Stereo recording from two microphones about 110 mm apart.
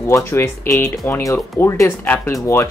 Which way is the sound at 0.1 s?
20° left (ahead or behind).